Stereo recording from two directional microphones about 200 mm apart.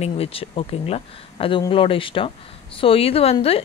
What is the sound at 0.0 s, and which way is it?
Speech, 30° left (ahead or behind).